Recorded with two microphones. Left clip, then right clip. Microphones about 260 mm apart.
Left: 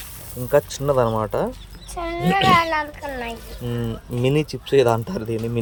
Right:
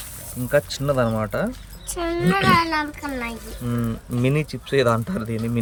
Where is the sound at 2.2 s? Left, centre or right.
Centre.